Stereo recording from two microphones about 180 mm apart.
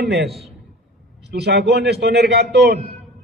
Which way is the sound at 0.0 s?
65° right (ahead or behind).